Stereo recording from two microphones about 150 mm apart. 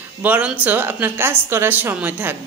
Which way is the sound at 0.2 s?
10° right (ahead or behind).